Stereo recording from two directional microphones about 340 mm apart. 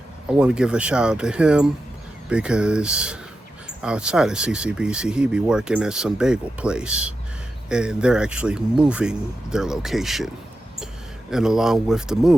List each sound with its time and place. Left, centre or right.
0.3 s speech: centre
11.3 s speech: centre